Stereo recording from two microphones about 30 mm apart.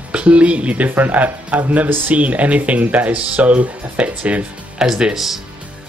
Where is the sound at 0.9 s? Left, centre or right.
Right.